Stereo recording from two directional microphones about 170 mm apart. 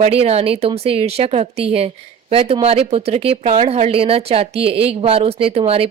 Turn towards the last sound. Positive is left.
turn(degrees=-35)  # may be behind; listen again after turning